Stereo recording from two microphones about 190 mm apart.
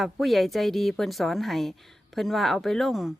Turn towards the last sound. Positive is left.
turn(degrees=0)  # may be behind; listen again after turning